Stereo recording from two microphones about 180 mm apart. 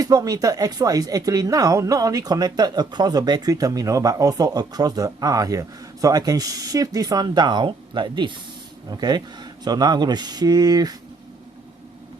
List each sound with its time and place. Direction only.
0.0 s speech: 20° right (ahead or behind)